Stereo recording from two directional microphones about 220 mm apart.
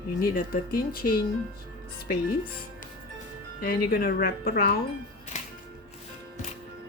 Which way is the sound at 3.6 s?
45° left (ahead or behind).